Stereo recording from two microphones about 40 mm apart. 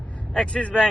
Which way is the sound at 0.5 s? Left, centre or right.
Left.